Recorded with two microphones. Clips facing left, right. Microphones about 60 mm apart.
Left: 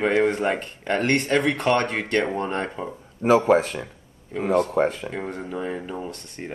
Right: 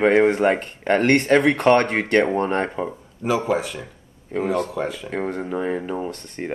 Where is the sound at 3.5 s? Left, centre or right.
Left.